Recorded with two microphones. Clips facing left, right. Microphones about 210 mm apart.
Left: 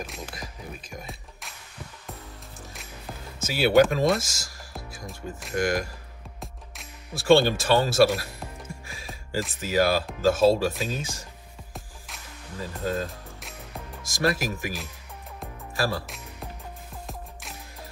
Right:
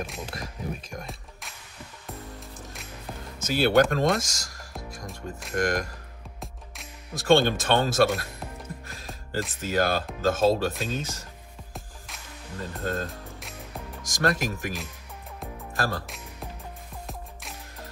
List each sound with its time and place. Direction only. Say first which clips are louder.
0.0 s speech: right 2 dB; centre (ahead or behind)
2.7 s music: even; centre (ahead or behind)
9.4 s speech: left 2 dB; 5° left (ahead or behind)
11.7 s music: even; centre (ahead or behind)
15.8 s speech: left 2 dB; centre (ahead or behind)
17.0 s music: even; centre (ahead or behind)